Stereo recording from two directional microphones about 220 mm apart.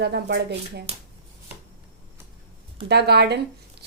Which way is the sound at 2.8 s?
50° right (ahead or behind).